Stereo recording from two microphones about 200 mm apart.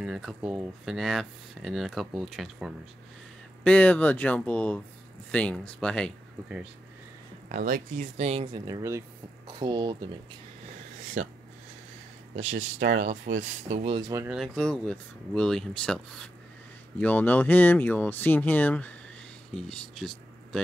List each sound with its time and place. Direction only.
0.0 s speech: centre (ahead or behind)
7.4 s speech: 45° right (ahead or behind); by 8.6 s 30° right (ahead or behind)
8.6 s speech: 15° right (ahead or behind)
12.4 s speech: 35° right (ahead or behind)
14.1 s speech: 10° right (ahead or behind)
14.4 s speech: centre (ahead or behind)